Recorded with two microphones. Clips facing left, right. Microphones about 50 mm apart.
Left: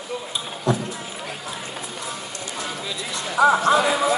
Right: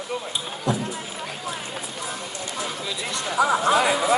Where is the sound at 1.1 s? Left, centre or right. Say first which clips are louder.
Right 1 dB; centre.